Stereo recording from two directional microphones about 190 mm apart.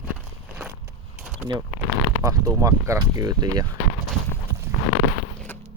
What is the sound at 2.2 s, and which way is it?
Speech, 15° right (ahead or behind).